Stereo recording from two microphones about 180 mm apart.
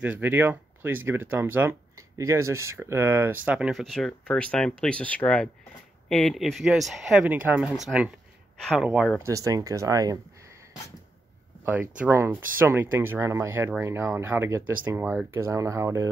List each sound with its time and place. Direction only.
0.0 s speech: 10° right (ahead or behind)
9.2 s speech: 20° right (ahead or behind)
11.6 s speech: 10° right (ahead or behind)